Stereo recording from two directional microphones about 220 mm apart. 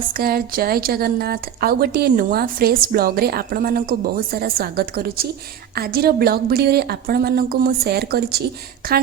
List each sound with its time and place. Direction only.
0.1 s a woman's voice: 40° right (ahead or behind)